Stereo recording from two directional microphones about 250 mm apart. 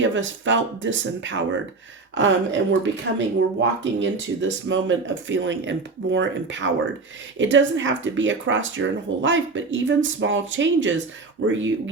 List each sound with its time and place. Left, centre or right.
0.0 s speech: right